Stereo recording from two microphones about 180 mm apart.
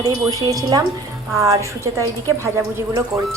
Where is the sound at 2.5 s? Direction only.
15° right (ahead or behind).